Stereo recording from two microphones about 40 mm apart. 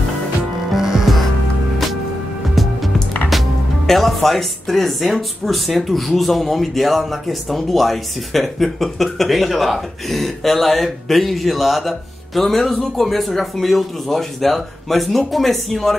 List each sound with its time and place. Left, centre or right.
0.7 s music: centre
2.5 s music: centre
3.3 s speech: centre